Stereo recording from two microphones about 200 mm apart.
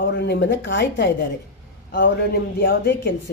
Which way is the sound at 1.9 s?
50° left (ahead or behind).